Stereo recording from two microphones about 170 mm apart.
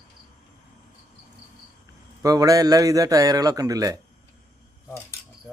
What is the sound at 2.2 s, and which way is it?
A man's voice, 20° right (ahead or behind).